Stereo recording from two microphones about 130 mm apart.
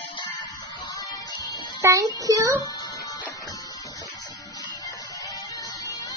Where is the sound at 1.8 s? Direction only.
25° right (ahead or behind).